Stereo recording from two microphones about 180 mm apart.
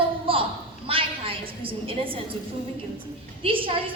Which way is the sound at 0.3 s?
30° right (ahead or behind).